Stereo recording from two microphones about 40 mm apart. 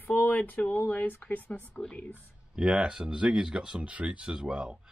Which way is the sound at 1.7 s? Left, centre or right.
Left.